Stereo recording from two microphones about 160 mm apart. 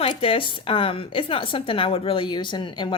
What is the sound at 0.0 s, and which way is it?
A woman's voice, 35° left (ahead or behind).